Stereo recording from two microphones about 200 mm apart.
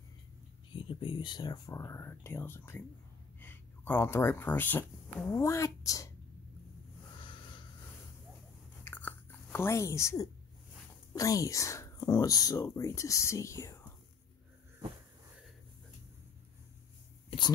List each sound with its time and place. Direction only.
0.7 s speech: 25° left (ahead or behind)
7.2 s a sound: 25° left (ahead or behind)
8.8 s biting: 10° left (ahead or behind)
11.1 s speech: 15° left (ahead or behind)